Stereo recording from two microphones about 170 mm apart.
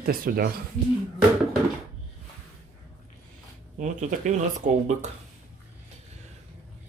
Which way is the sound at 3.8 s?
45° right (ahead or behind).